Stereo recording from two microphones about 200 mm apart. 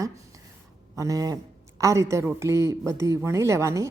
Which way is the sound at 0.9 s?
15° right (ahead or behind).